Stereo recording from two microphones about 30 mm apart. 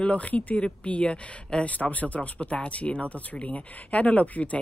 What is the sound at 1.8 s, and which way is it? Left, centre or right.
Speech, left.